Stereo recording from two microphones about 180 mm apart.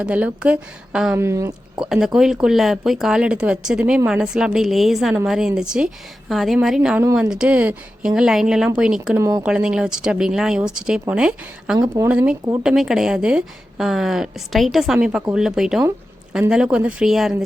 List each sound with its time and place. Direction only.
0.0 s a woman's voice: 5° right (ahead or behind)
1.8 s a woman's voice: centre (ahead or behind)
9.1 s a woman's voice: 15° right (ahead or behind)
9.4 s a woman's voice: 5° right (ahead or behind)
11.8 s a woman's voice: 15° right (ahead or behind)
12.1 s a woman's voice: 5° right (ahead or behind)